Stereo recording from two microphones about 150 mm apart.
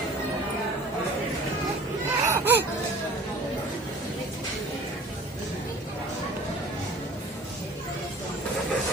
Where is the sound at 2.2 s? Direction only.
15° right (ahead or behind).